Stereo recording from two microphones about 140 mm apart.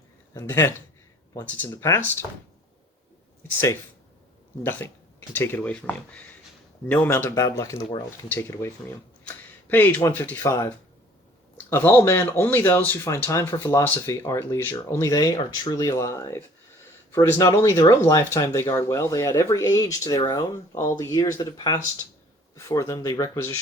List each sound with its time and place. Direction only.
0.3 s speech: 20° left (ahead or behind)
4.6 s speech: 15° left (ahead or behind)
9.2 s a sound: 15° left (ahead or behind)
10.4 s speech: 20° left (ahead or behind)
11.7 s speech: 15° left (ahead or behind)